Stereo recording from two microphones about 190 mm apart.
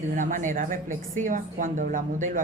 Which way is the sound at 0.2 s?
45° right (ahead or behind).